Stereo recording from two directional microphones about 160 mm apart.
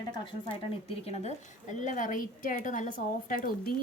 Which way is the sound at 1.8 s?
55° left (ahead or behind).